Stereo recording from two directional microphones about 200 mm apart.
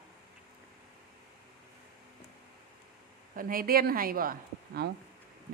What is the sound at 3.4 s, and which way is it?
A woman's voice, 45° right (ahead or behind).